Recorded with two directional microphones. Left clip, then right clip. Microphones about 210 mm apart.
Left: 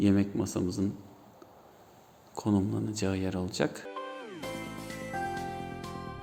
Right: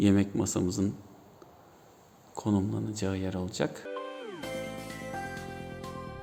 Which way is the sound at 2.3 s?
5° right (ahead or behind).